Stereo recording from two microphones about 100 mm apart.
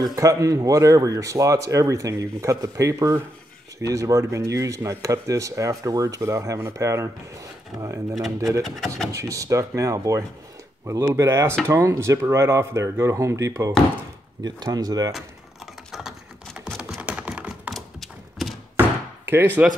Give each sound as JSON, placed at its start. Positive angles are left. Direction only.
{"t": 0.0, "sound": "speech", "side_deg": -35}
{"t": 8.6, "sound": "speech", "side_deg": 0}
{"t": 9.1, "sound": "speech", "side_deg": -35}
{"t": 14.4, "sound": "speech", "side_deg": -40}
{"t": 15.1, "sound": "typing", "side_deg": -5}
{"t": 17.7, "sound": "a sound", "side_deg": 0}
{"t": 19.2, "sound": "speech", "side_deg": -20}